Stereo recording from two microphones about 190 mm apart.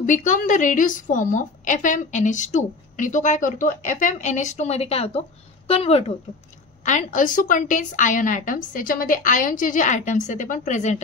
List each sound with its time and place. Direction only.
0.0 s a woman's voice: 40° left (ahead or behind)